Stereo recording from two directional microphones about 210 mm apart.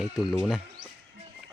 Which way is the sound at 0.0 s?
Centre (ahead or behind).